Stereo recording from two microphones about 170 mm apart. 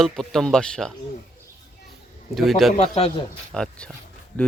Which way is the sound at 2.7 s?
35° left (ahead or behind).